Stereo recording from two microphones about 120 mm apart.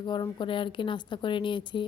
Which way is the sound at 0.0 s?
40° left (ahead or behind).